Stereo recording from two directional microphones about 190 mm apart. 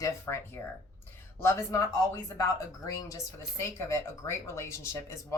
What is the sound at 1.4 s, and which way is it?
Speech, 15° left (ahead or behind).